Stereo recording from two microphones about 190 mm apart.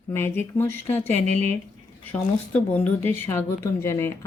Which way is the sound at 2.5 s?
5° left (ahead or behind).